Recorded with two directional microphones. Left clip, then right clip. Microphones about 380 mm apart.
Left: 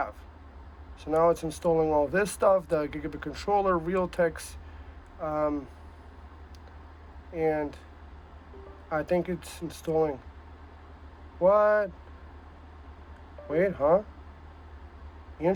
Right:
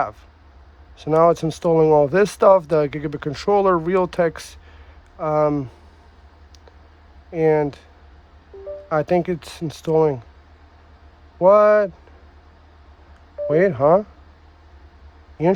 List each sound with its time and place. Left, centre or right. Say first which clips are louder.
0.9 s speech: right 8 dB; right
7.3 s speech: right 10 dB; right
8.9 s speech: right 8 dB; right
11.4 s speech: right 9 dB; right
13.5 s speech: right 8 dB; right